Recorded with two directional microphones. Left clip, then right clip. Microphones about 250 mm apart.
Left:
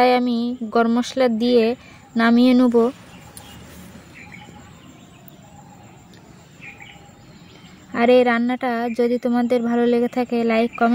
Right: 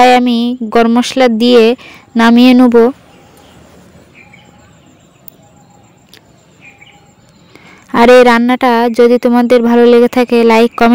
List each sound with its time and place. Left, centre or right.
0.0 s speech: right
7.9 s speech: right